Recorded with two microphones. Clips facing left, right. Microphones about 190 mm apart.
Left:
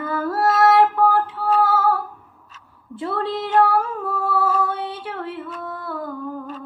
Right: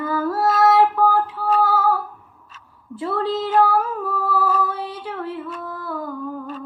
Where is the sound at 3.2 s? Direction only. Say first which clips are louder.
Even; 25° left (ahead or behind).